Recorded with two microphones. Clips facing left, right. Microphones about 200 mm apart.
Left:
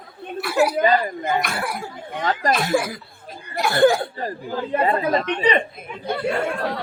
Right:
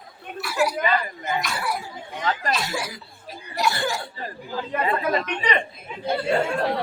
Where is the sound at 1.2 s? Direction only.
55° left (ahead or behind).